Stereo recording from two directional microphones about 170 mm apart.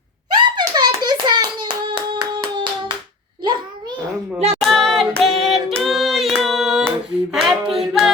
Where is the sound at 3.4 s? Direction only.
25° right (ahead or behind).